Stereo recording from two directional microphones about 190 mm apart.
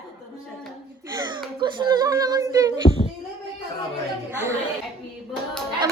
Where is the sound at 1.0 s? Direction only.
20° right (ahead or behind).